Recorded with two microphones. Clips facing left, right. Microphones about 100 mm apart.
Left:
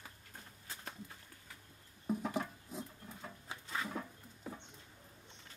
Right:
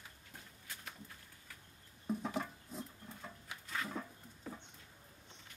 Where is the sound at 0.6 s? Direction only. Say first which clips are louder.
Left 3 dB; 30° left (ahead or behind).